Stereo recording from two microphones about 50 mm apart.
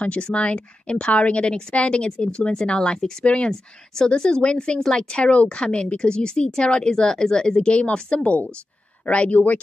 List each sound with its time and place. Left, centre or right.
0.0 s a woman's voice: left